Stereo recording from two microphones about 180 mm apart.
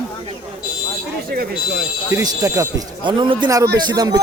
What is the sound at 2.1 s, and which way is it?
Speech, 20° right (ahead or behind).